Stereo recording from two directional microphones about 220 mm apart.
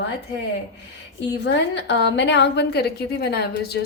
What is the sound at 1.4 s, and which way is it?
A woman's voice, 50° left (ahead or behind).